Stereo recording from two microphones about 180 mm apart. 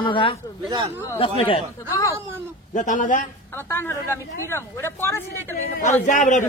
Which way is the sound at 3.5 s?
10° left (ahead or behind).